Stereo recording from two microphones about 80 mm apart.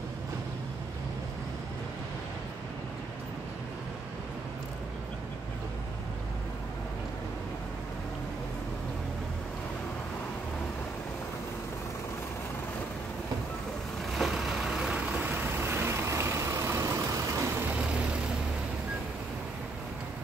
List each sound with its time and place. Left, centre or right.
14.1 s vehicle: centre; by 16.9 s right
17.6 s vehicle: centre